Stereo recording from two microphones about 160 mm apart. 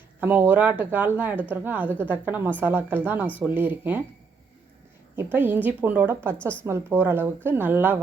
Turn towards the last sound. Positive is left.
turn(degrees=-10)  # may be behind; listen again after turning